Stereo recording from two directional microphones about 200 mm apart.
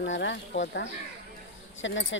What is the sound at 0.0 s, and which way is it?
Speech, 65° left (ahead or behind).